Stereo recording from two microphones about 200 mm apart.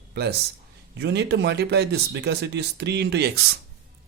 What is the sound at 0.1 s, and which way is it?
Speech, 55° right (ahead or behind).